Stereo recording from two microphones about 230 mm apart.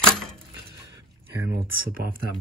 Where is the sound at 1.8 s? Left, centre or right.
Right.